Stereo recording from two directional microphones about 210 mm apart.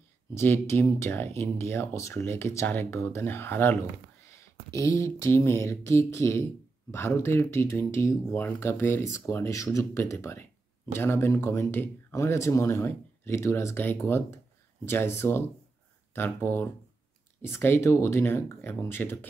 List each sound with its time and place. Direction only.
0.3 s speech: 10° left (ahead or behind)